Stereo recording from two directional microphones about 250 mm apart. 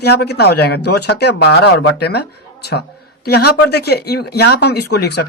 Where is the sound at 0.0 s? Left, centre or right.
Left.